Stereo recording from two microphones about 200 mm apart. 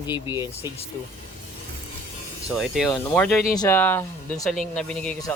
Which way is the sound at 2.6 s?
Centre (ahead or behind).